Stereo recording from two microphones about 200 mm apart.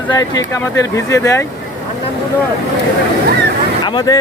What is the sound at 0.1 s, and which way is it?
A man's voice, 20° left (ahead or behind).